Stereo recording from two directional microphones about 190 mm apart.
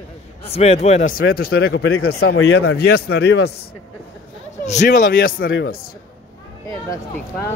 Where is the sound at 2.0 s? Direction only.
55° left (ahead or behind).